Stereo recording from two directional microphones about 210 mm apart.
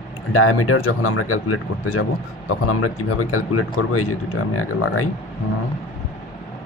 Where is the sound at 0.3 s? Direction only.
90° left.